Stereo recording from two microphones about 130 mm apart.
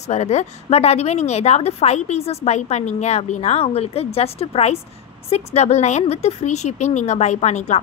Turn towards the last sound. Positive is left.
turn(degrees=60)  # may be behind; listen again after turning